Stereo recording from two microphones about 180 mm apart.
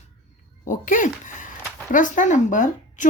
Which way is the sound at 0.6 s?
45° left (ahead or behind).